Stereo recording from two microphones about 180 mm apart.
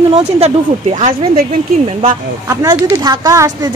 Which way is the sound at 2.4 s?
20° right (ahead or behind).